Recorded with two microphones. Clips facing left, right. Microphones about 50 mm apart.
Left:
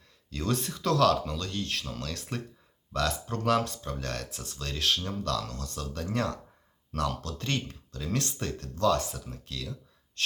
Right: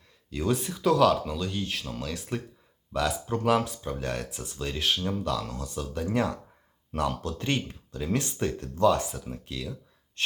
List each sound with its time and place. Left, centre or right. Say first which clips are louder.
0.3 s speech: right 3 dB; centre
10.2 s gasp: right 1 dB; right